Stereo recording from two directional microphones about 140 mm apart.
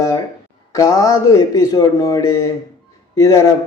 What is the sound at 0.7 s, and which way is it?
Speech, 25° left (ahead or behind).